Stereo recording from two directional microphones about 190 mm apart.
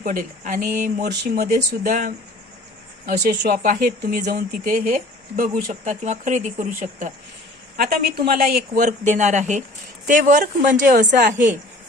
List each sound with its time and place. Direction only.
0.0 s speech: 45° right (ahead or behind)